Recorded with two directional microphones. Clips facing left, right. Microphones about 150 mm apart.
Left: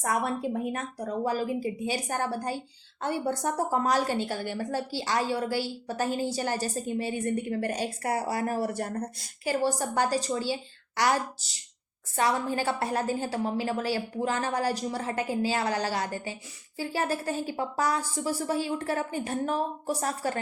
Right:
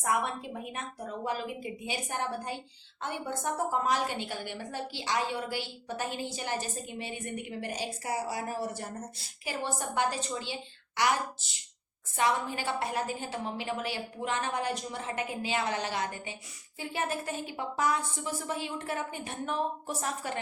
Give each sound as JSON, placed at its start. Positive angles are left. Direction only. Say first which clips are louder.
{"t": 0.0, "sound": "a woman's voice", "louder": "left 3 dB", "side_deg": 40}
{"t": 7.8, "sound": "a woman's voice", "louder": "left 4 dB", "side_deg": 60}
{"t": 9.4, "sound": "a woman's voice", "louder": "left 7 dB", "side_deg": 40}